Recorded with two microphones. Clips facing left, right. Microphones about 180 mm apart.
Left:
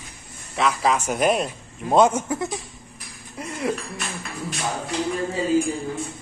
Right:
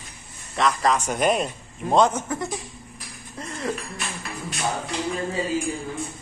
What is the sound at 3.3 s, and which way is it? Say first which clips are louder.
Cutlery: left 3 dB; 10° left (ahead or behind).